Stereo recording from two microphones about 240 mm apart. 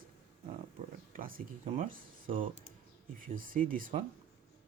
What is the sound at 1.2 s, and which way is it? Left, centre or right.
Speech, right.